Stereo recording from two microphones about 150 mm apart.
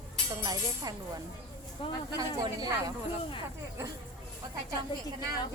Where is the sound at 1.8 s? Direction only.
35° left (ahead or behind).